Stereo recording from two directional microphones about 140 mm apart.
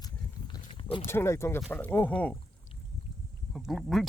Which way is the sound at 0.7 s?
40° left (ahead or behind).